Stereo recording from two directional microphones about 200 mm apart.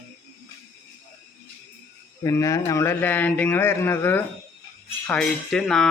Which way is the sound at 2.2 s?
15° left (ahead or behind).